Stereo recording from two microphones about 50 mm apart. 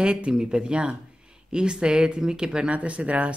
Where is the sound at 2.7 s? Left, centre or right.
Right.